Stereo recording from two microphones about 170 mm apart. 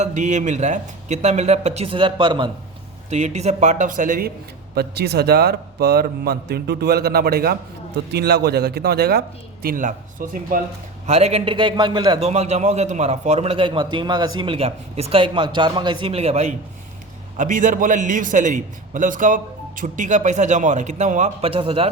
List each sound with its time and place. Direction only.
0.0 s a man's voice: 45° right (ahead or behind); by 2.5 s 30° right (ahead or behind)
3.1 s a man's voice: 40° right (ahead or behind)
4.7 s speech: 70° right (ahead or behind)
9.6 s speech: 55° right (ahead or behind)
11.0 s a man's voice: 40° right (ahead or behind)
12.3 s a man's voice: 40° right (ahead or behind)